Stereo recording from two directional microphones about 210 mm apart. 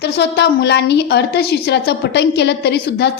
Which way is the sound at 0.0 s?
55° left (ahead or behind).